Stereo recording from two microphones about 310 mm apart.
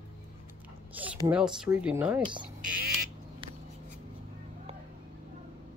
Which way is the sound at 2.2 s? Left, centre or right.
Centre.